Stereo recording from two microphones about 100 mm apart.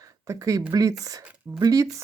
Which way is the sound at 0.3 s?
35° right (ahead or behind).